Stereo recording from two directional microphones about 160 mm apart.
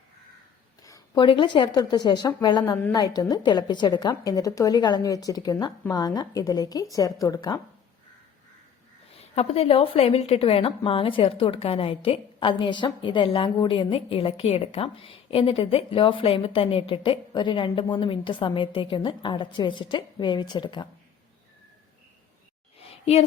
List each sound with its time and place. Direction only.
0.8 s a woman's voice: 20° left (ahead or behind)
9.3 s a woman's voice: 40° left (ahead or behind)
22.8 s a sound: 40° left (ahead or behind)